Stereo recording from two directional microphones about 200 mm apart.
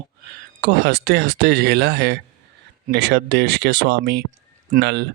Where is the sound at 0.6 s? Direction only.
55° right (ahead or behind).